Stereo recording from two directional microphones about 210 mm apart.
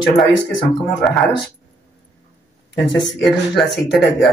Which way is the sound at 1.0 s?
Centre (ahead or behind).